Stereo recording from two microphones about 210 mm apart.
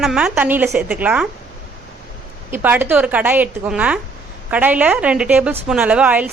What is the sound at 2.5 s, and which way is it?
A woman's voice, 10° right (ahead or behind).